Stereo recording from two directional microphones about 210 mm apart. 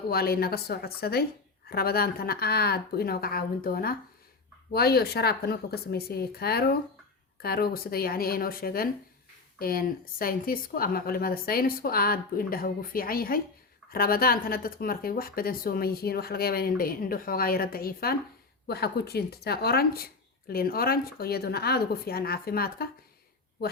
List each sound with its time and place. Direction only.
0.1 s speech: 45° left (ahead or behind)